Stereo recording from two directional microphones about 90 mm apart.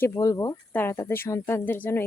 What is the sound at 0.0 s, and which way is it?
Speech, 35° left (ahead or behind).